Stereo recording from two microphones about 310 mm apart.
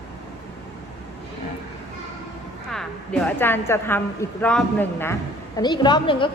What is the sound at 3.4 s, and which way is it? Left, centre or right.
A woman's voice, centre.